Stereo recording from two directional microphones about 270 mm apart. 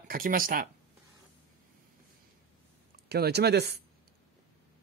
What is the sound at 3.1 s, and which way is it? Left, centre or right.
Speech, right.